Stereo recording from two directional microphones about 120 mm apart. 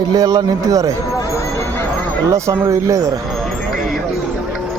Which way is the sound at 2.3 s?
25° right (ahead or behind).